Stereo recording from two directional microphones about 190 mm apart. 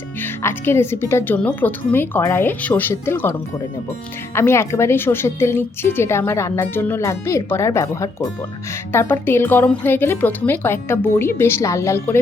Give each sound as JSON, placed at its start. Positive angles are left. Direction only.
{"t": 0.2, "sound": "a woman's voice", "side_deg": 10}
{"t": 4.4, "sound": "a woman's voice", "side_deg": 15}